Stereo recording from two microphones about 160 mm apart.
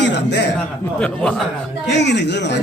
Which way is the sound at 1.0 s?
5° left (ahead or behind).